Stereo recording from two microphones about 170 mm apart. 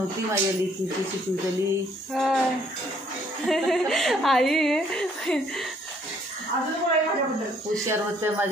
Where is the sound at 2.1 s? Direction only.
Centre (ahead or behind).